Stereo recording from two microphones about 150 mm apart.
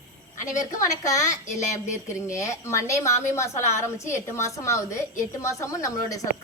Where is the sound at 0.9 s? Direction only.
20° left (ahead or behind).